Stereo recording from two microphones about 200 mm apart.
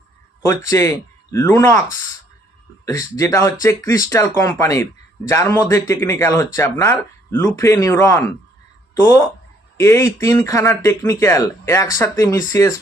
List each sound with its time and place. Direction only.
0.4 s speech: 15° left (ahead or behind)
9.7 s speech: 15° left (ahead or behind)